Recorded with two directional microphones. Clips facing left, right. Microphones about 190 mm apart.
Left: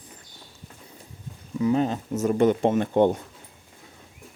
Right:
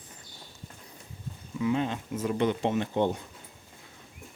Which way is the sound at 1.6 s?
40° left (ahead or behind).